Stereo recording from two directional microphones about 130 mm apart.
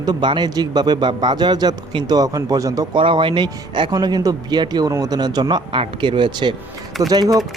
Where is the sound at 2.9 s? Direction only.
40° right (ahead or behind).